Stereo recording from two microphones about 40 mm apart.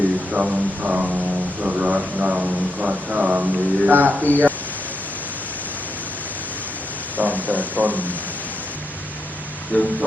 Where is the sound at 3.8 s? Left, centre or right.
Right.